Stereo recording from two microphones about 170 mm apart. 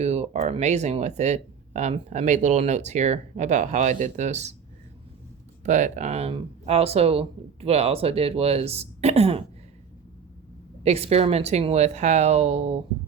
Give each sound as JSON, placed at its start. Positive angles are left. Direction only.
{"t": 0.0, "sound": "speech", "side_deg": -40}
{"t": 5.6, "sound": "speech", "side_deg": -45}
{"t": 10.8, "sound": "speech", "side_deg": -35}